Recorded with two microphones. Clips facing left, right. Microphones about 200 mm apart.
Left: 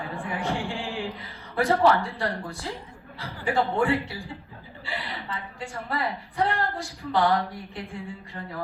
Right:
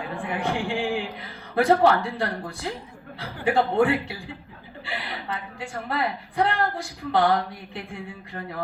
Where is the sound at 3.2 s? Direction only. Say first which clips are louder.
Right 3 dB; 60° right (ahead or behind).